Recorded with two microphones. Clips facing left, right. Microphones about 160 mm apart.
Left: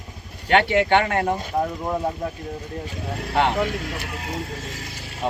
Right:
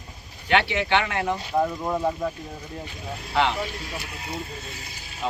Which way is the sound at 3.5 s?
75° left (ahead or behind).